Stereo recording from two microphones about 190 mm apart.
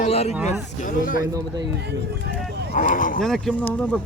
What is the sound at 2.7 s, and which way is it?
Speech, 45° left (ahead or behind).